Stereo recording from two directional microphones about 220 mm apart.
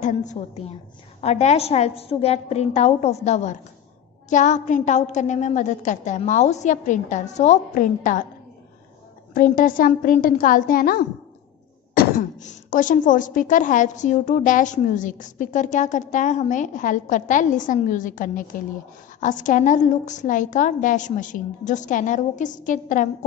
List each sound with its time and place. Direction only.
0.0 s a woman's voice: 35° left (ahead or behind)
9.3 s speech: 40° left (ahead or behind)